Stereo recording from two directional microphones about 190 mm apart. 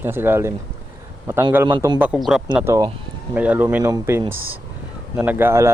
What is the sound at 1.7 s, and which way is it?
Speech, 20° right (ahead or behind).